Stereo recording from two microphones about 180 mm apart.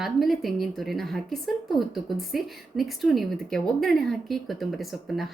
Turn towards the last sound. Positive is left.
turn(degrees=0)  # may be behind; listen again after turning